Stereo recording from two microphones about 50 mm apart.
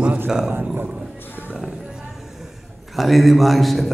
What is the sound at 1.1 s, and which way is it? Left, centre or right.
Roaring cats, left.